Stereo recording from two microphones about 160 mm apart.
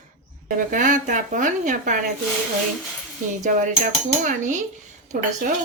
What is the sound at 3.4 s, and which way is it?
A woman's voice, 50° right (ahead or behind).